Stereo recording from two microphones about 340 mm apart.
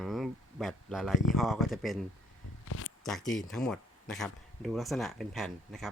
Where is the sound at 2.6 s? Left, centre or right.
Left.